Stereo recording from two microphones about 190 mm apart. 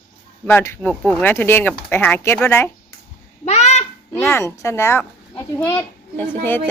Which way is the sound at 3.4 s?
35° left (ahead or behind).